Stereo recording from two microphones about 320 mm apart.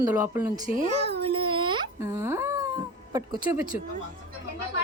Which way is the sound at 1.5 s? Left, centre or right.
Centre.